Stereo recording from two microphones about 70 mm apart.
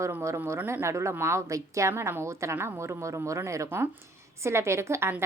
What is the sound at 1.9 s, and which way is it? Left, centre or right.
A woman's voice, right.